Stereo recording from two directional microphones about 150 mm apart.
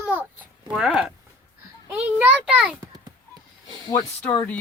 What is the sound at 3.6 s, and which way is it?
Speech, 30° left (ahead or behind).